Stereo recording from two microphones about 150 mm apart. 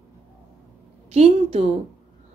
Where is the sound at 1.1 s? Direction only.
45° right (ahead or behind).